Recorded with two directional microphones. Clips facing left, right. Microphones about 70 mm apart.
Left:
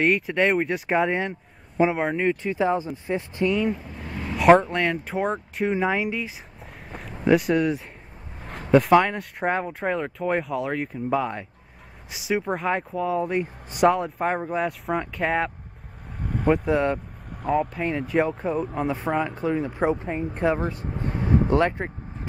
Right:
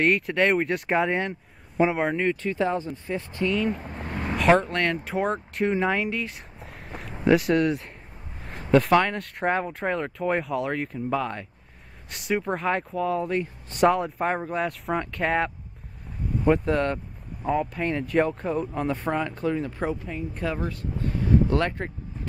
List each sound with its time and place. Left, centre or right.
0.0 s speech: centre
3.1 s speech: left
3.7 s vehicle: right
4.4 s speech: centre
13.8 s speech: centre
16.2 s vehicle: left
16.4 s speech: centre
19.5 s speech: left
21.1 s vehicle: left
21.5 s speech: centre